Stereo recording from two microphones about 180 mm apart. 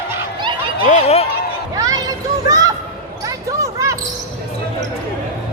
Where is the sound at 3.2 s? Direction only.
15° right (ahead or behind).